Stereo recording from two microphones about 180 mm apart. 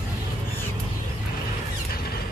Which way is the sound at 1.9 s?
60° left (ahead or behind).